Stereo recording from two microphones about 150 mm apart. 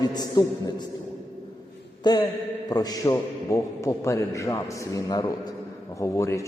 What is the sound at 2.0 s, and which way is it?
A man's voice, 30° left (ahead or behind).